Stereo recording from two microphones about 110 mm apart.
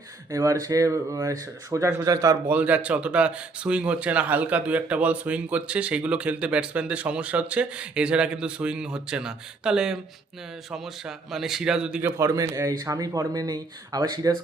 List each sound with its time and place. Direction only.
0.3 s speech: 30° right (ahead or behind)
2.5 s a man's voice: 15° right (ahead or behind)
12.0 s speech: 25° right (ahead or behind)